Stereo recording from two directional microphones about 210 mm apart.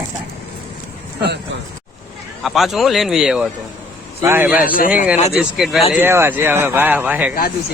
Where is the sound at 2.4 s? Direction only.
Centre (ahead or behind).